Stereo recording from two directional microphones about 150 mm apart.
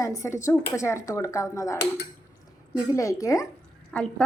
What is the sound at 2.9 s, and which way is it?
Speech, 20° left (ahead or behind).